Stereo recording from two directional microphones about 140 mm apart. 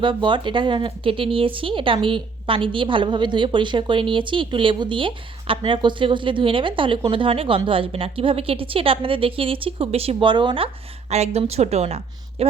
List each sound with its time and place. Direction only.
0.0 s a woman's voice: 35° right (ahead or behind)
11.1 s a woman's voice: 50° right (ahead or behind)